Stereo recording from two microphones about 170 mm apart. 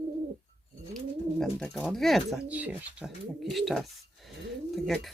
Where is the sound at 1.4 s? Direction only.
Centre (ahead or behind).